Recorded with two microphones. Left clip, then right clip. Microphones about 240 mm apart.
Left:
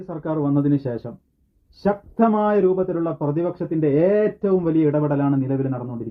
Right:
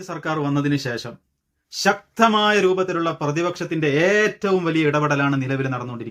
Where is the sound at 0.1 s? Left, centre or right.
Right.